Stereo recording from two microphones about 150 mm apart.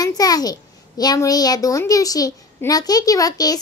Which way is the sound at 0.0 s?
25° left (ahead or behind).